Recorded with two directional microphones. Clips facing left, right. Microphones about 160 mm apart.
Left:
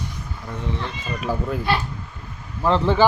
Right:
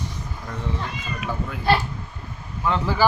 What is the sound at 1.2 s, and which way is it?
Speech, 35° left (ahead or behind).